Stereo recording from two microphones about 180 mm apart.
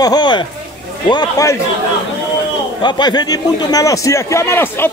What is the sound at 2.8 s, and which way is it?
A man's voice, 25° left (ahead or behind).